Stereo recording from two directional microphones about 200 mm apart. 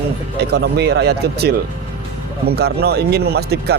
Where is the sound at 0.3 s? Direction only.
55° right (ahead or behind).